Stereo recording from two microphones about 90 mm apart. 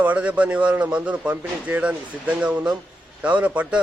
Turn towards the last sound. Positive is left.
turn(degrees=-15)  # may be behind; listen again after turning